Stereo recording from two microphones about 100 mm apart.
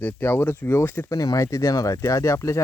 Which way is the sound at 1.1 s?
35° left (ahead or behind).